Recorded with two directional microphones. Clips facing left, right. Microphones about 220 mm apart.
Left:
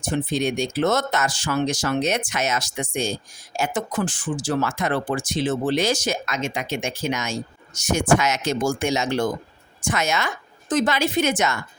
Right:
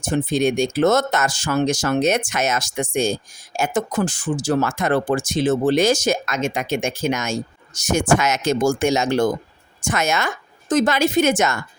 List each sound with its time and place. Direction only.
0.0 s speech: 45° right (ahead or behind)